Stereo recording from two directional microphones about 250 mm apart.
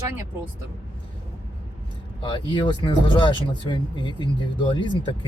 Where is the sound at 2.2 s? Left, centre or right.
Centre.